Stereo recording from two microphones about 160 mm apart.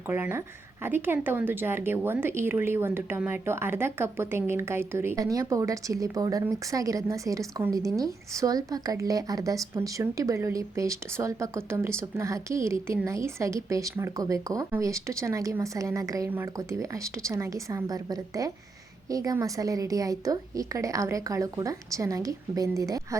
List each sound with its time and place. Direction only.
0.1 s a woman's voice: 15° right (ahead or behind)